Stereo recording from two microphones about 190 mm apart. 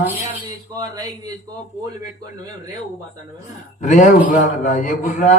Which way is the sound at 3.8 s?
40° left (ahead or behind).